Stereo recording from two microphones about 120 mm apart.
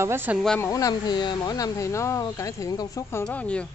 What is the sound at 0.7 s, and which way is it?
Speech, 35° left (ahead or behind).